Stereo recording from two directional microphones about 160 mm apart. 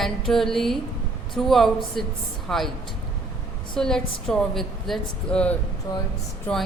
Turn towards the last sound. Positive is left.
turn(degrees=10)  # may be behind; listen again after turning